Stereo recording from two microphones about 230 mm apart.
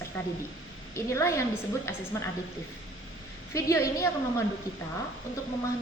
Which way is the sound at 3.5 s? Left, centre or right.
Centre.